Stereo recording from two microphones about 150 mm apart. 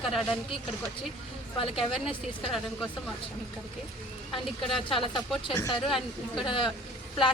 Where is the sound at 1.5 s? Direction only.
35° left (ahead or behind).